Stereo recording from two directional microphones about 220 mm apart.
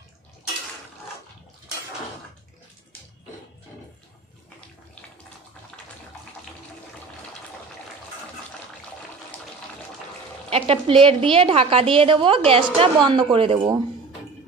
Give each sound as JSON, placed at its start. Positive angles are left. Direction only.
{"t": 10.5, "sound": "a woman's voice", "side_deg": -25}